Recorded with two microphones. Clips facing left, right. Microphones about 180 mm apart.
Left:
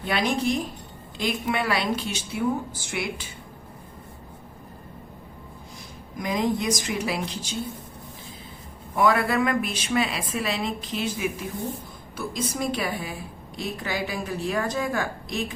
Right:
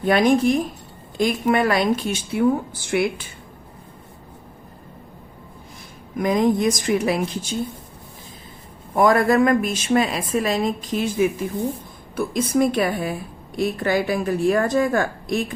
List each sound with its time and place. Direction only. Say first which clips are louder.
0.0 s a woman's voice: right 8 dB; 50° right (ahead or behind)
6.1 s a woman's voice: right 7 dB; 55° right (ahead or behind)
9.0 s a woman's voice: right 6 dB; 45° right (ahead or behind)